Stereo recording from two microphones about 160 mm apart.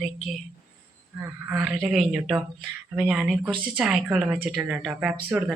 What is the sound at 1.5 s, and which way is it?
A woman's voice, 5° right (ahead or behind).